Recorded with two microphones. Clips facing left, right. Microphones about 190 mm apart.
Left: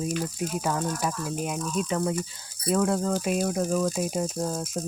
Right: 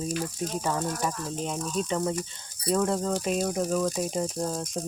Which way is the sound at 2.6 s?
5° left (ahead or behind).